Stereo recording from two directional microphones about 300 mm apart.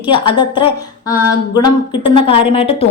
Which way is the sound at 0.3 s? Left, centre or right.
Centre.